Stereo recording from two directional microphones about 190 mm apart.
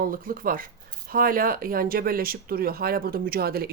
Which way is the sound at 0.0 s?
50° right (ahead or behind).